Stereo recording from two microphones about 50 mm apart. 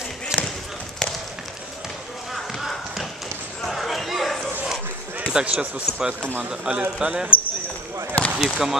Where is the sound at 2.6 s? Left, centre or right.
Centre.